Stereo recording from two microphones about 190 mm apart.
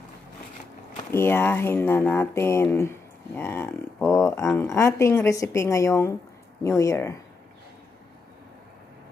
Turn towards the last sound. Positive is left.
turn(degrees=15)  # may be behind; listen again after turning